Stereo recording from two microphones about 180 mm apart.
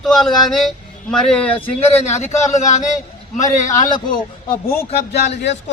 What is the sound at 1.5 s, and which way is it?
Speech, 35° left (ahead or behind).